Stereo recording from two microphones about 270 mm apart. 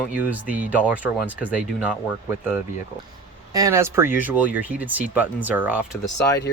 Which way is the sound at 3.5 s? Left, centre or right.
Centre.